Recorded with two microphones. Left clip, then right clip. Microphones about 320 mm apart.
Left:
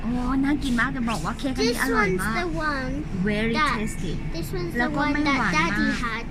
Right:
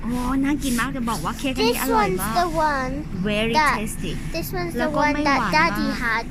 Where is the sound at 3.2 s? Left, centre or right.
Centre.